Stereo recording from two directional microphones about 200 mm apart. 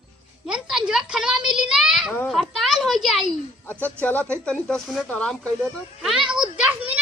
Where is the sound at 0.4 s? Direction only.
5° right (ahead or behind).